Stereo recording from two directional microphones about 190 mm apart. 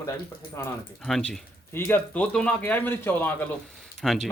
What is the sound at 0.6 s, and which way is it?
Speech, 15° left (ahead or behind).